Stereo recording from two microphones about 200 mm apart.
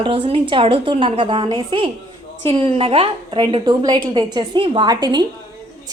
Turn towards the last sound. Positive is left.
turn(degrees=-20)  # may be behind; listen again after turning